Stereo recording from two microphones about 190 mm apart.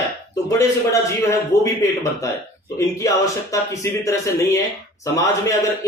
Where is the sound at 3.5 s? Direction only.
15° left (ahead or behind).